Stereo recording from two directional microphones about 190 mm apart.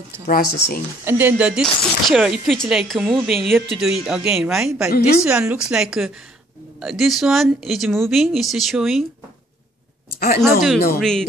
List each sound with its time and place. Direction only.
0.3 s speech: 50° left (ahead or behind)
1.0 s speech: 10° right (ahead or behind)
10.1 s speech: 50° left (ahead or behind)
10.4 s speech: centre (ahead or behind)